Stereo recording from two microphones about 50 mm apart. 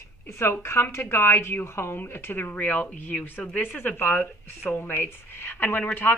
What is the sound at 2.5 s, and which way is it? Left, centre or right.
Speech, left.